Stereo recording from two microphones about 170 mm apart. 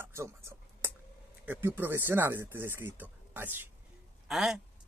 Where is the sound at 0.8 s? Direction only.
15° right (ahead or behind).